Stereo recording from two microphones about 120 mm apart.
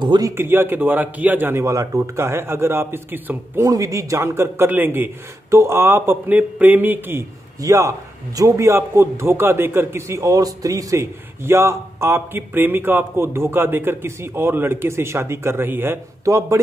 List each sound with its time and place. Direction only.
0.0 s a man's voice: 40° right (ahead or behind)
0.4 s a man's voice: 20° right (ahead or behind)
7.6 s a man's voice: 30° right (ahead or behind)